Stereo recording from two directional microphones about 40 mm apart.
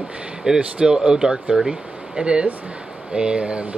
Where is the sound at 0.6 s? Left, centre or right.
Right.